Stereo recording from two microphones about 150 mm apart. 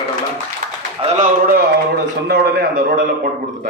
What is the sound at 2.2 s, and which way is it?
Speech, 90° right.